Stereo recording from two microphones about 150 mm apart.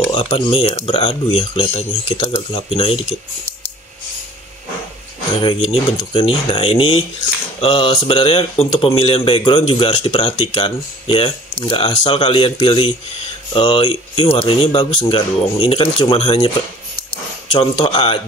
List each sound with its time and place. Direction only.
0.1 s speech: 30° left (ahead or behind)
0.5 s speech: 45° left (ahead or behind)
5.4 s speech: 40° left (ahead or behind)